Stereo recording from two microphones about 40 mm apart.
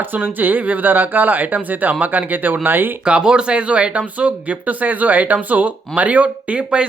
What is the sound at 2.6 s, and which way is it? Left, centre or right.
Speech, right.